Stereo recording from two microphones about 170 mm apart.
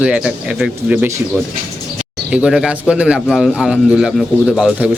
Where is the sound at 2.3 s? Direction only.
5° right (ahead or behind).